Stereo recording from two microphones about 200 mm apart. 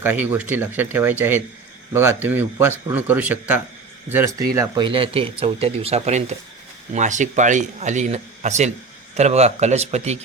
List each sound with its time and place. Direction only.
0.0 s a man's voice: 10° right (ahead or behind); by 10.2 s 35° right (ahead or behind)